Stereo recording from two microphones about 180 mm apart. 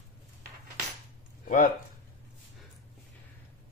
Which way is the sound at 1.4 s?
50° left (ahead or behind).